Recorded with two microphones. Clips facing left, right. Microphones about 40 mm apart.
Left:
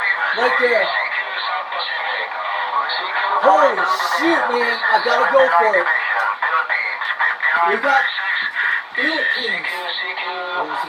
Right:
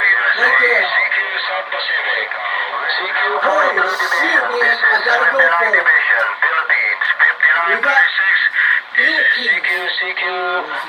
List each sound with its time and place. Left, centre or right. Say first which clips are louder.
0.0 s a sound: right 5 dB; right
3.2 s speech: left 2 dB; right
4.2 s radio: right 3 dB; right
4.6 s speech: right 4 dB; right
5.7 s radio: right 5 dB; right